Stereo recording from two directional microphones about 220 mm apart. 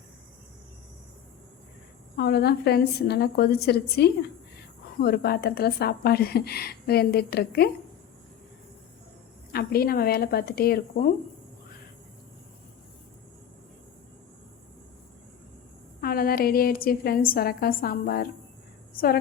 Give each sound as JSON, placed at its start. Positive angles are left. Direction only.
{"t": 2.1, "sound": "a woman's voice", "side_deg": 45}
{"t": 9.5, "sound": "a woman's voice", "side_deg": 45}
{"t": 16.0, "sound": "a woman's voice", "side_deg": 45}